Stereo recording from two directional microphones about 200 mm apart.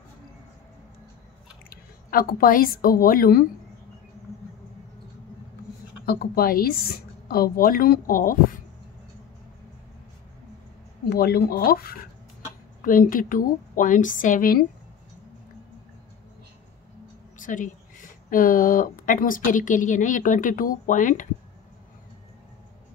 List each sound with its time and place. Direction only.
1.7 s a woman's voice: 45° left (ahead or behind)
6.0 s a woman's voice: 50° left (ahead or behind)
11.1 s a woman's voice: 50° left (ahead or behind)
17.4 s a sound: 40° left (ahead or behind)
18.3 s a woman's voice: 45° left (ahead or behind)